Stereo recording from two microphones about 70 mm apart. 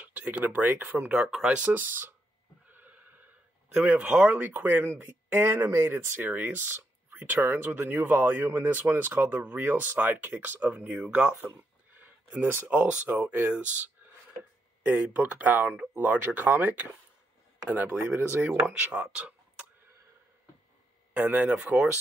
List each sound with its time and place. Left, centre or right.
0.0 s speech: centre
2.7 s a sound: right
3.8 s speech: right
9.6 s speech: right
9.9 s speech: right
12.0 s speech: right
14.9 s speech: right
21.1 s speech: right